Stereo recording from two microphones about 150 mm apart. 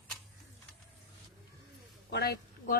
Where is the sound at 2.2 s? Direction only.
90° left.